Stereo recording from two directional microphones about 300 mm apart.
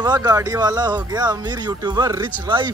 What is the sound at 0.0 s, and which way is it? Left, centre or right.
Speech, centre.